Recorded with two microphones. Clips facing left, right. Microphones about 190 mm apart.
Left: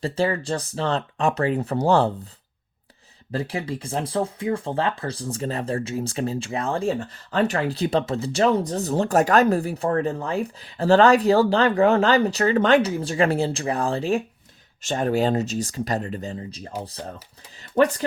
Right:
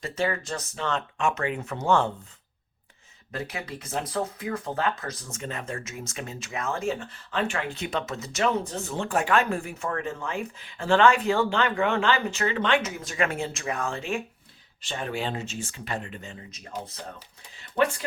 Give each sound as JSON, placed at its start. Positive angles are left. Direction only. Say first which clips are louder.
{"t": 0.0, "sound": "speech", "louder": "left 5 dB", "side_deg": 30}
{"t": 3.3, "sound": "speech", "louder": "left 7 dB", "side_deg": 30}